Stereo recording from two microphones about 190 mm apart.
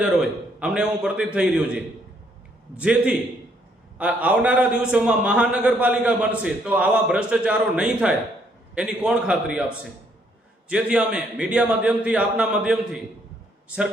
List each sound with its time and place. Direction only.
0.0 s a man's voice: 5° right (ahead or behind)